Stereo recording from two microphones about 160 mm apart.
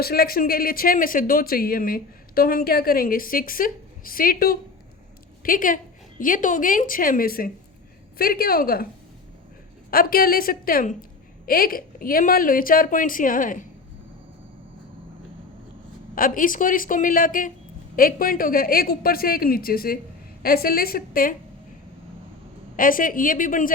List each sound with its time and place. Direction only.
0.0 s a woman's voice: 70° left (ahead or behind)
9.9 s speech: 65° left (ahead or behind)
16.1 s a woman's voice: 60° left (ahead or behind)
22.8 s speech: 60° left (ahead or behind)